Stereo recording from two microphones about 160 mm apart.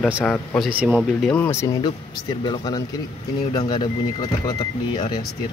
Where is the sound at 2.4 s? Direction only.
30° left (ahead or behind).